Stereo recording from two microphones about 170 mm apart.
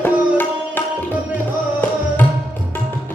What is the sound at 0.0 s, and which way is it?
Sitar, 10° left (ahead or behind).